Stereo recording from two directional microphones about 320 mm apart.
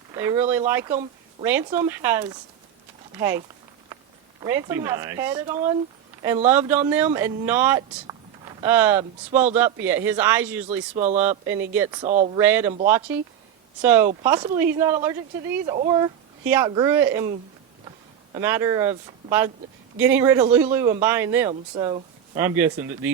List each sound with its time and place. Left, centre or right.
0.1 s speech: centre
10.9 s speech: right
11.2 s speech: centre
12.4 s speech: centre
13.8 s speech: centre
18.3 s speech: centre